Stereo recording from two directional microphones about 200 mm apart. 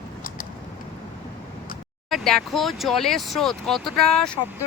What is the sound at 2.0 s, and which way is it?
Speech, centre (ahead or behind).